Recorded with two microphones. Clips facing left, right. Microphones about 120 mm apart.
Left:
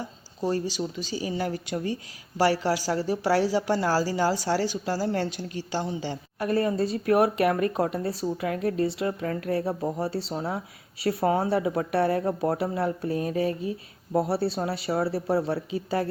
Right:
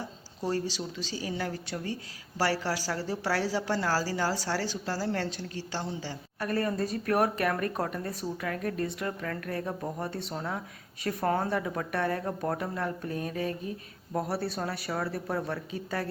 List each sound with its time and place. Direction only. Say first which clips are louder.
0.7 s speech: left 5 dB; 5° left (ahead or behind)
6.1 s speech: left 5 dB; 25° left (ahead or behind)
11.2 s speech: left 4 dB; 5° left (ahead or behind)
11.7 s speech: left 6 dB; 30° left (ahead or behind)